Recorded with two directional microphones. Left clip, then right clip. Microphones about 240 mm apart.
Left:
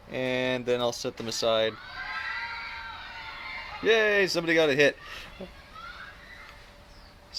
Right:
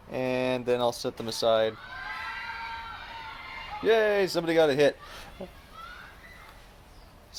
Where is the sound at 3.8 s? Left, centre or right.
Centre.